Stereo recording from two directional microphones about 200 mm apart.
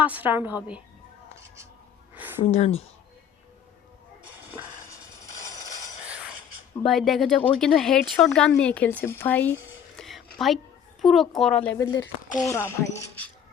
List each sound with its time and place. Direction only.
0.0 s a woman's voice: 10° right (ahead or behind)
2.4 s speech: 30° left (ahead or behind)
6.1 s music: 5° right (ahead or behind)
6.8 s speech: centre (ahead or behind)
10.0 s a sound: centre (ahead or behind)
11.0 s speech: centre (ahead or behind)